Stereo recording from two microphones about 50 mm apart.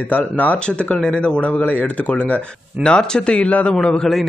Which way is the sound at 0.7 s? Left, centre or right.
Centre.